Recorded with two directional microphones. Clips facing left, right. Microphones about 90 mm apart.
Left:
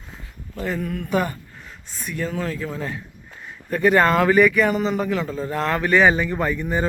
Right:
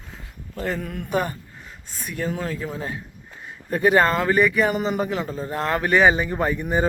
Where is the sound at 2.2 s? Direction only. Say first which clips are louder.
Even; 25° right (ahead or behind).